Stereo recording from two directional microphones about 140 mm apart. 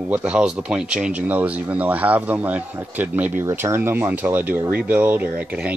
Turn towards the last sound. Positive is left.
turn(degrees=-10)  # may be behind; listen again after turning